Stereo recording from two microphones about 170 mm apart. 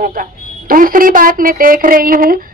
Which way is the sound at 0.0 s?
55° right (ahead or behind).